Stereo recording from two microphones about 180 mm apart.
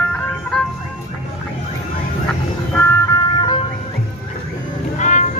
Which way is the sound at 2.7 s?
15° left (ahead or behind).